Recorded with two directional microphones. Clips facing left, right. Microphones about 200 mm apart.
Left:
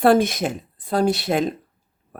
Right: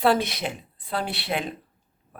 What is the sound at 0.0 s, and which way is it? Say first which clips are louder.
Speech: left 6 dB; 50° left (ahead or behind).